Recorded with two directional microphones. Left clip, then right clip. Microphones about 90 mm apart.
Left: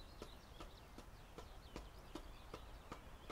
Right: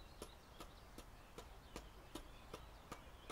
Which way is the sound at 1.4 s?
35° right (ahead or behind).